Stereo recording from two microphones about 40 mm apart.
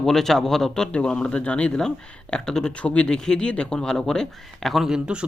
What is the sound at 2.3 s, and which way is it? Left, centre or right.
Speech, centre.